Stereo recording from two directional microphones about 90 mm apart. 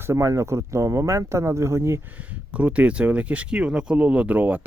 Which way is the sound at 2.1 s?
15° right (ahead or behind).